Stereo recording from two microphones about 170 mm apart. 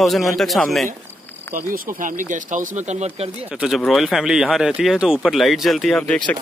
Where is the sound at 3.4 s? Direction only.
5° right (ahead or behind).